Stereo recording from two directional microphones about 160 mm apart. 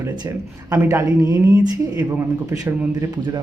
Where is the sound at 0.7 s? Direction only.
15° right (ahead or behind).